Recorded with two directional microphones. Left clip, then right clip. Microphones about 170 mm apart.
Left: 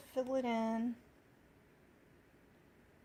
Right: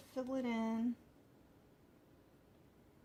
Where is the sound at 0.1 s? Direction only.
75° left (ahead or behind).